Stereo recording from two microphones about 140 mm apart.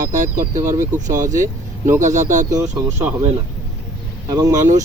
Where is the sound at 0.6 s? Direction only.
20° right (ahead or behind).